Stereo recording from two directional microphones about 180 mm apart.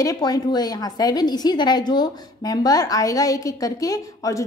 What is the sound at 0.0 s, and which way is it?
A woman's voice, 20° left (ahead or behind).